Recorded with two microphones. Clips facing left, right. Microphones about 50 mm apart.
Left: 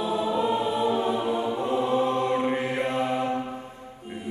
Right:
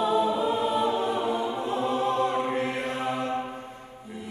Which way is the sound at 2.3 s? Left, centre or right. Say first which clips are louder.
Left 2 dB; left.